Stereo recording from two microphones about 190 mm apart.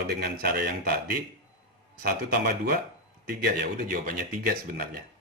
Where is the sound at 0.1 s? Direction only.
55° right (ahead or behind).